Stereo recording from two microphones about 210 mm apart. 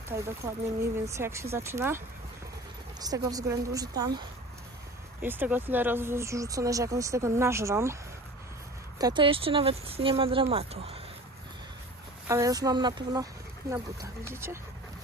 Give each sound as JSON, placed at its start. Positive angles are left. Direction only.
{"t": 0.1, "sound": "speech", "side_deg": -10}
{"t": 3.0, "sound": "speech", "side_deg": -15}
{"t": 9.0, "sound": "speech", "side_deg": -20}
{"t": 12.3, "sound": "speech", "side_deg": -15}